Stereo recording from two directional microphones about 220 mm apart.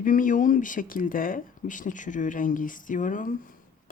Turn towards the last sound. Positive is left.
turn(degrees=35)  # may be behind; listen again after turning